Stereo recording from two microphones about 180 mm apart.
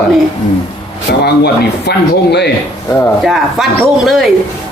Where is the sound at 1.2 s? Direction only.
65° left (ahead or behind).